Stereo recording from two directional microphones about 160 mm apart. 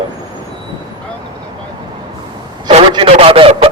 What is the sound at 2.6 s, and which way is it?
A man's voice, 35° right (ahead or behind).